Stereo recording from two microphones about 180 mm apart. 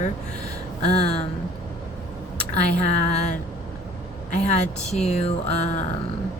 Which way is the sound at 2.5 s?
40° left (ahead or behind).